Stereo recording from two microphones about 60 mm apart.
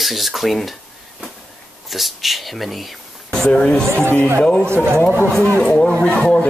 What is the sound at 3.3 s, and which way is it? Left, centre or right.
Speech, centre.